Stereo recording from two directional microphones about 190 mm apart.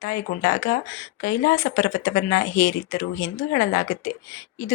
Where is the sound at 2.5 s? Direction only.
15° left (ahead or behind).